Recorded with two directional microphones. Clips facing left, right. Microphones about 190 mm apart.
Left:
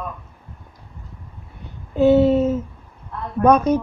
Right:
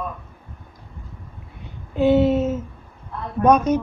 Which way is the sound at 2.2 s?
35° left (ahead or behind).